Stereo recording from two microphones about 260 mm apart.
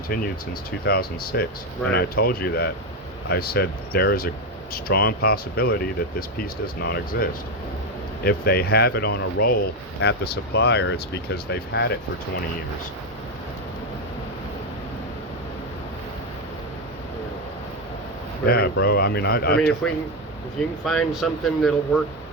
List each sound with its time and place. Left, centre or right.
0.9 s speech: left
18.4 s speech: left
19.8 s speech: centre